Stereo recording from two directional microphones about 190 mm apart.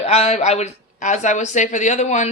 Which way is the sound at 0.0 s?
35° left (ahead or behind).